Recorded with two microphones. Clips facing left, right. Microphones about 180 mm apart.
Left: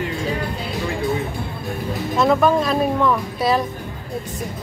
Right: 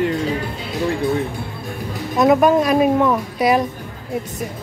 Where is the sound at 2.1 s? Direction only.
15° right (ahead or behind).